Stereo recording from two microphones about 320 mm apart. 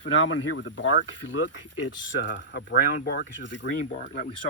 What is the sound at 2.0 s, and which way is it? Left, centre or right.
Speech, left.